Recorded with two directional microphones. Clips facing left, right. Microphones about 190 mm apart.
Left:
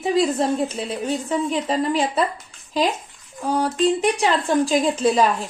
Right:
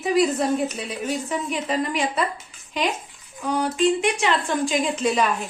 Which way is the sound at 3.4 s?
30° left (ahead or behind).